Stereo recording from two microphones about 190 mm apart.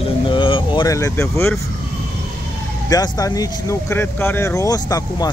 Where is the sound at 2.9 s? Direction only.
20° left (ahead or behind).